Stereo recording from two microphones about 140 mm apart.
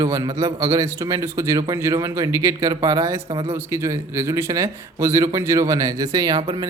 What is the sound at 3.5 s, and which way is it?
A man's voice, 20° right (ahead or behind).